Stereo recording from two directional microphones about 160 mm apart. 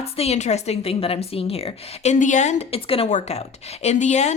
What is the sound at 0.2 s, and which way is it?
A woman's voice, 45° left (ahead or behind).